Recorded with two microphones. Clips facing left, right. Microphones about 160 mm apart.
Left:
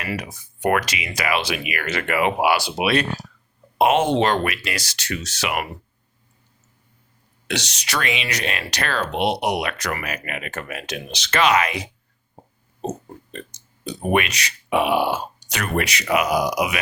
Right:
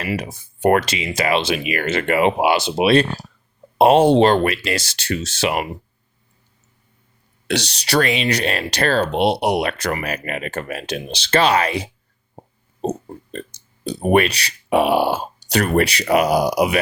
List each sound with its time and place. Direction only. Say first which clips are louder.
0.2 s speech: right 5 dB; 30° right (ahead or behind)
7.4 s speech: right 5 dB; 35° right (ahead or behind)